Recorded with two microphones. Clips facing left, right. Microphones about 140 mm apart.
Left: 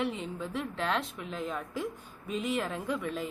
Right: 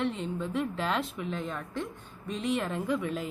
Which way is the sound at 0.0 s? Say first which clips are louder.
Right 2 dB; 5° left (ahead or behind).